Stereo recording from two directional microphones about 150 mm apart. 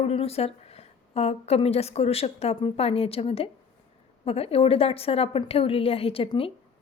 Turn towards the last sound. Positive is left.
turn(degrees=40)  # may be behind; listen again after turning